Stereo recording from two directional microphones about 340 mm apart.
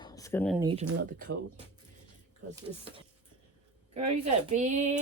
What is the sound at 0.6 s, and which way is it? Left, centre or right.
Speech, centre.